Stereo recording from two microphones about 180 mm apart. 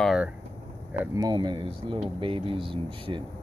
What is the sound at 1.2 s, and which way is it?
Speech, 25° right (ahead or behind).